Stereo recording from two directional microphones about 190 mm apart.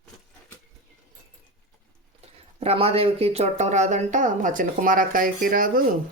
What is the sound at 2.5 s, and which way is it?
Speech, 30° right (ahead or behind).